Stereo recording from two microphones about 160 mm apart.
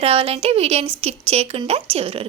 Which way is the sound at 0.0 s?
35° right (ahead or behind).